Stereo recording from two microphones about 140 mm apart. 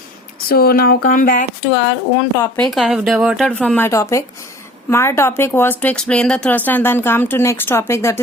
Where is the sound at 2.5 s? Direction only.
5° left (ahead or behind).